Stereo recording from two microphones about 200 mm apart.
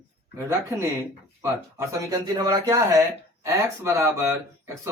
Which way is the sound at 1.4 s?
15° right (ahead or behind).